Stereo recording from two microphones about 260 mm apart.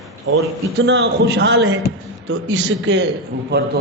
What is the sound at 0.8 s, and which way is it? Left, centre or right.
A man's voice, right.